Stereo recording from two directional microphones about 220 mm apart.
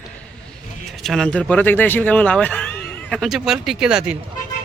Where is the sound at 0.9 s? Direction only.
Centre (ahead or behind).